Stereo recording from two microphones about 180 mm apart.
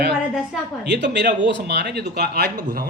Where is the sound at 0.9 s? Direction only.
75° right (ahead or behind).